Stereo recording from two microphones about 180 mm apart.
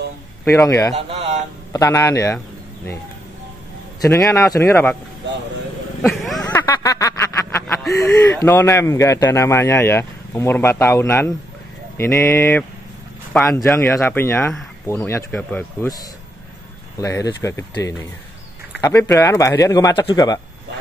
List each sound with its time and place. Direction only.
0.6 s speech: 15° left (ahead or behind)
0.9 s a man's voice: 35° right (ahead or behind)
1.7 s speech: 15° left (ahead or behind)
4.0 s speech: 20° left (ahead or behind)
6.2 s speech: 5° left (ahead or behind)
6.6 s a sound: 20° left (ahead or behind)
7.6 s a sound: 5° left (ahead or behind)
8.0 s speech: 20° left (ahead or behind)
17.0 s speech: 15° left (ahead or behind)